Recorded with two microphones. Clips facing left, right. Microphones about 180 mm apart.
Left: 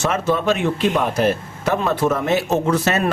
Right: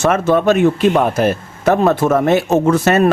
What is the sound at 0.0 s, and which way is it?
Speech, 50° right (ahead or behind).